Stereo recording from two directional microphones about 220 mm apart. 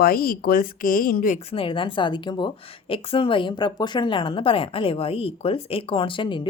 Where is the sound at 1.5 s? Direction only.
25° left (ahead or behind).